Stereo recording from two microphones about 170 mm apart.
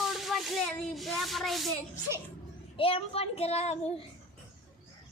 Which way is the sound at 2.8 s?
35° left (ahead or behind).